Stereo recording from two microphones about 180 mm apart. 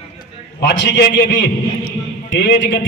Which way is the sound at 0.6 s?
70° left (ahead or behind).